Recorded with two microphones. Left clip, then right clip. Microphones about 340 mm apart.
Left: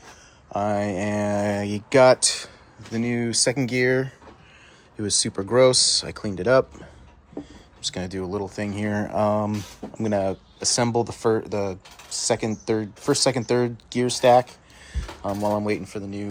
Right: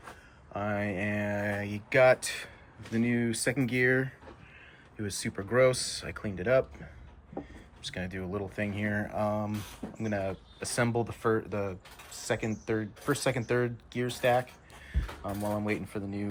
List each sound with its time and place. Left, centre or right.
0.5 s speech: centre
7.8 s speech: centre